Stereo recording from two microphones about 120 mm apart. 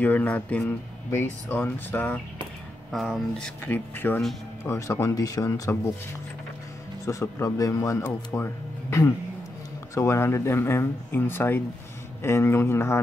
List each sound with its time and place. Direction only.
0.0 s speech: 15° left (ahead or behind)
2.9 s speech: 5° left (ahead or behind); by 5.9 s 25° left (ahead or behind)
7.1 s speech: 25° left (ahead or behind)
9.9 s speech: 20° left (ahead or behind)